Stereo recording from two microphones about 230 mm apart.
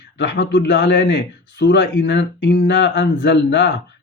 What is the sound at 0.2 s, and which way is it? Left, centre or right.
A man's voice, left.